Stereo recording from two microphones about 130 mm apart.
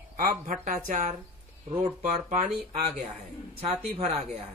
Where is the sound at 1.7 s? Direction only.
50° right (ahead or behind).